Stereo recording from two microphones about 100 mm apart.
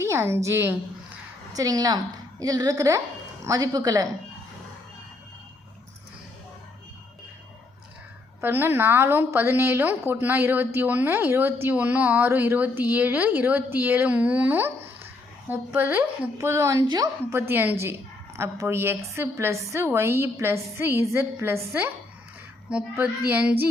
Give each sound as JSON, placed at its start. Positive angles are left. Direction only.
{"t": 0.0, "sound": "a woman's voice", "side_deg": -25}
{"t": 1.5, "sound": "speech", "side_deg": -40}
{"t": 8.4, "sound": "a woman's voice", "side_deg": -20}
{"t": 17.3, "sound": "a woman's voice", "side_deg": -20}